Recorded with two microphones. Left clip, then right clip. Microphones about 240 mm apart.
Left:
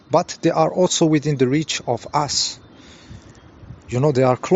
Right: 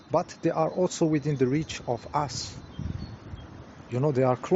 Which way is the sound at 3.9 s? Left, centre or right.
Left.